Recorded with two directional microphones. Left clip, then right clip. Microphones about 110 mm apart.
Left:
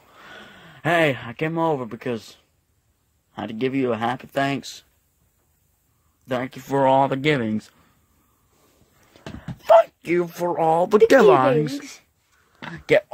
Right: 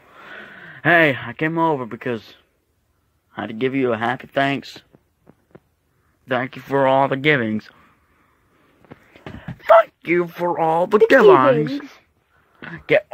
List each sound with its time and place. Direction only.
0.0 s speech: 5° left (ahead or behind)
6.2 s speech: 20° left (ahead or behind)
9.1 s a sound: centre (ahead or behind)
9.6 s speech: 15° left (ahead or behind)
12.7 s speech: 40° left (ahead or behind)